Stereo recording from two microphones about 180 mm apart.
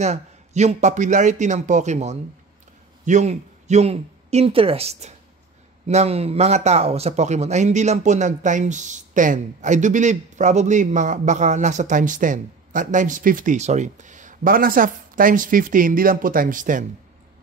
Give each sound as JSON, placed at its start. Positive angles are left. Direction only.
{"t": 0.0, "sound": "a man's voice", "side_deg": -40}